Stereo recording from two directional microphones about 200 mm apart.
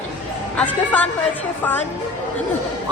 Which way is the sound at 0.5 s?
5° left (ahead or behind).